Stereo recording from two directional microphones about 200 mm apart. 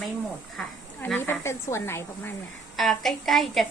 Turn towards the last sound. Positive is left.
turn(degrees=0)  # may be behind; listen again after turning